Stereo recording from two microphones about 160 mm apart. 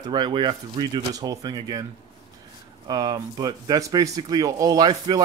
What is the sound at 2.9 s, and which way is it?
Speech, 25° right (ahead or behind).